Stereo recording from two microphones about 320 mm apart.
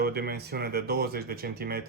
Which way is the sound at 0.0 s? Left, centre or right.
Right.